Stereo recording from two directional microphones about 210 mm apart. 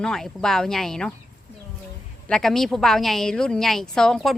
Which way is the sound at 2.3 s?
Centre (ahead or behind).